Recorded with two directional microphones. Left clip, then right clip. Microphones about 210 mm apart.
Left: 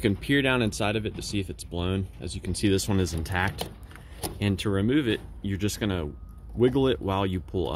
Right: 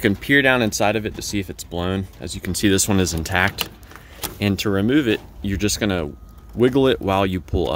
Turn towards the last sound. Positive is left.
turn(degrees=-30)  # may be behind; listen again after turning